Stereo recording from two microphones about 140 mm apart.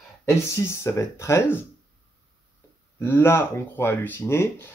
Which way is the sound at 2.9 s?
15° left (ahead or behind).